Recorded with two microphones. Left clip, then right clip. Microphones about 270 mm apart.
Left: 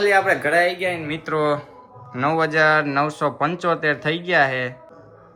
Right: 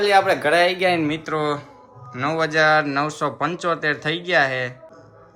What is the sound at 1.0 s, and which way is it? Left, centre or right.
Speech, centre.